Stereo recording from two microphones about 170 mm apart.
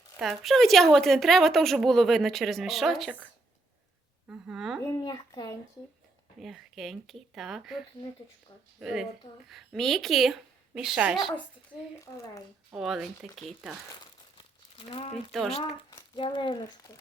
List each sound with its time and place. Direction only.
0.2 s a woman's voice: centre (ahead or behind)
4.3 s speech: 5° right (ahead or behind)
5.0 s speech: 20° left (ahead or behind)
6.4 s a woman's voice: centre (ahead or behind)
11.9 s speech: 20° left (ahead or behind)
12.7 s a woman's voice: centre (ahead or behind)
14.0 s crumpling: 30° left (ahead or behind)
15.3 s a woman's voice: centre (ahead or behind)
16.1 s speech: 30° left (ahead or behind)